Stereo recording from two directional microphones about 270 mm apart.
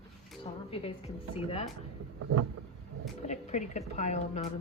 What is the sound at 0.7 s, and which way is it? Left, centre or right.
Speech, left.